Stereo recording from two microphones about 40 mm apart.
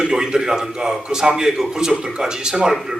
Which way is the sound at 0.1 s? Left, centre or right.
Centre.